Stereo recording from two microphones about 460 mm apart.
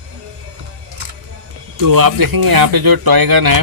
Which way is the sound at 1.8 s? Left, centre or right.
Right.